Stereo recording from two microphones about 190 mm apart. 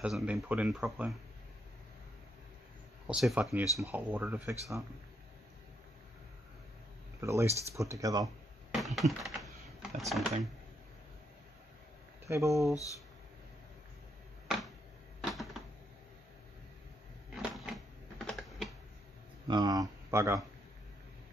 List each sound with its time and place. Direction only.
0.0 s speech: 5° right (ahead or behind)
3.1 s speech: 5° right (ahead or behind)
7.2 s speech: 15° right (ahead or behind)
8.8 s speech: centre (ahead or behind)
12.3 s speech: 15° right (ahead or behind)
15.3 s typewriter: centre (ahead or behind)
17.4 s typing: centre (ahead or behind)
19.4 s speech: 20° right (ahead or behind)